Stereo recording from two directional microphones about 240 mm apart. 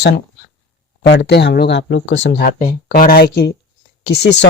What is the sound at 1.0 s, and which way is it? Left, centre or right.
Speech, left.